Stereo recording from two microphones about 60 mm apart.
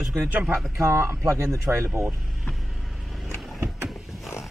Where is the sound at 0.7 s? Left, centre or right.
Right.